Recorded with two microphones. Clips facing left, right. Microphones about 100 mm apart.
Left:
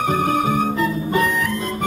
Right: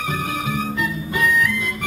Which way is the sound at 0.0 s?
45° left (ahead or behind).